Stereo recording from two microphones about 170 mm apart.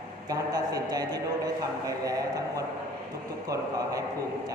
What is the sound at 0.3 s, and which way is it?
A man's voice, 20° right (ahead or behind).